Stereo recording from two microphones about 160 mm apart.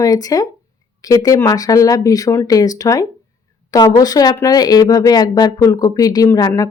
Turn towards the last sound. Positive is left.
turn(degrees=25)  # may be behind; listen again after turning